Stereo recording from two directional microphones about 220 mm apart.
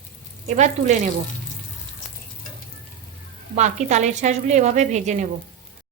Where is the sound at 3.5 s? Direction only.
30° right (ahead or behind).